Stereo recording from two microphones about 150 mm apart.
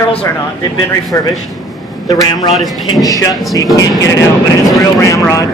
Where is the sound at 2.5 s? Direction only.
Centre (ahead or behind).